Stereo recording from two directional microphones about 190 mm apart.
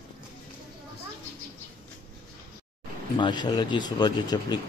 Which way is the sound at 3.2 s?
25° left (ahead or behind).